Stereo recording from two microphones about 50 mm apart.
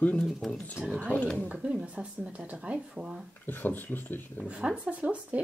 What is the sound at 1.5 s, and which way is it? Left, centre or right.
A woman's voice, centre.